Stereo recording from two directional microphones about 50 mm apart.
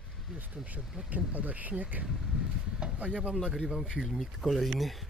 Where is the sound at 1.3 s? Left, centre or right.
Right.